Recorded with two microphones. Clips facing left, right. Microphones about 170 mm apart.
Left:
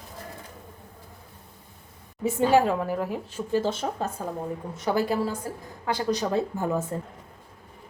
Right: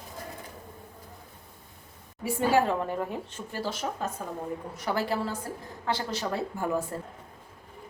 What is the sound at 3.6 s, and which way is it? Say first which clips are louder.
Speech: left 4 dB; 25° left (ahead or behind).